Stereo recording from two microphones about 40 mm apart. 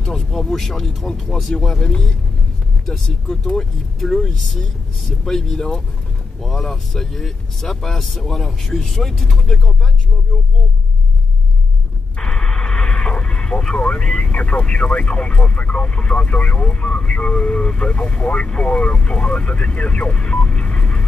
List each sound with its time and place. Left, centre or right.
0.0 s speech: centre
3.5 s speech: centre
12.2 s radio: centre
14.0 s speech: left